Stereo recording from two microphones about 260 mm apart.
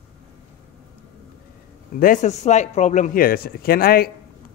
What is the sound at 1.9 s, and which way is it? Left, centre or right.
Speech, left.